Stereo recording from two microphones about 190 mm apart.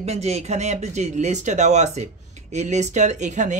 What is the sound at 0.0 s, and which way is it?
Speech, 35° right (ahead or behind).